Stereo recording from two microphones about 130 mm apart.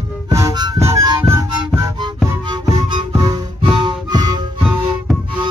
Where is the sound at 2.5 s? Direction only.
35° right (ahead or behind).